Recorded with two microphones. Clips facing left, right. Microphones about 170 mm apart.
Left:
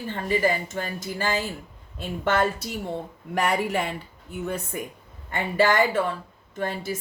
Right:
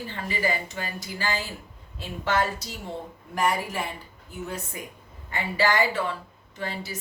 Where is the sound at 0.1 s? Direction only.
50° left (ahead or behind).